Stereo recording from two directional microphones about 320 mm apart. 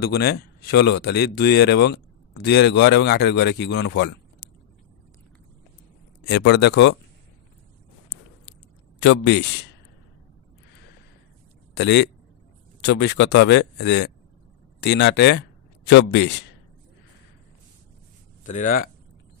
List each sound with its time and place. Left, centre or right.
0.0 s a man's voice: left
6.3 s a man's voice: left
9.0 s a man's voice: left
11.7 s a man's voice: left
18.4 s speech: left